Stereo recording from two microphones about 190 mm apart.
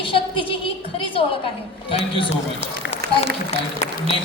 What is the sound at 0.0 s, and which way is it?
A woman's voice, 30° left (ahead or behind).